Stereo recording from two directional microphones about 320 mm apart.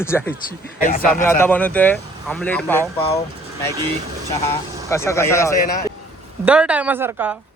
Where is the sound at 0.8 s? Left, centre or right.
Left.